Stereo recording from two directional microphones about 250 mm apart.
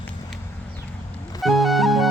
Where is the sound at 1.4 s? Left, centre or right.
Centre.